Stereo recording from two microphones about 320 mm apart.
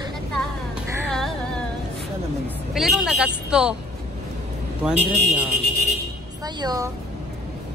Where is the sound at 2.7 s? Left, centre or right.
Centre.